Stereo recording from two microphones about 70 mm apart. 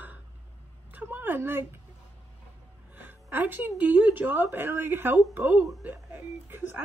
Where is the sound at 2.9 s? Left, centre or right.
Right.